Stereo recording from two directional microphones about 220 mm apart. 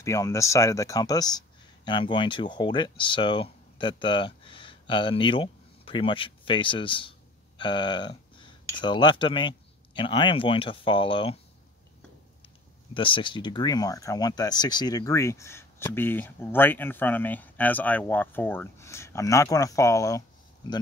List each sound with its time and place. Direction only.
0.0 s speech: 15° left (ahead or behind)
12.9 s speech: 25° left (ahead or behind)